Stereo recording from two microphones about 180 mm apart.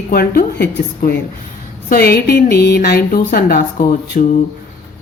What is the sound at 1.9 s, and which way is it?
A woman's voice, 60° left (ahead or behind).